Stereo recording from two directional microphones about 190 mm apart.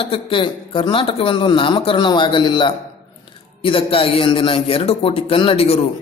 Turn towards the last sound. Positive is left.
turn(degrees=30)  # may be behind; listen again after turning